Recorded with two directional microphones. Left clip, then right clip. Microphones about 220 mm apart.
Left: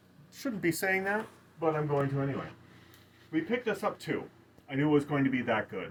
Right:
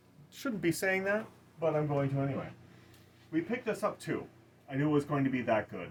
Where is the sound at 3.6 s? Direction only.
15° right (ahead or behind).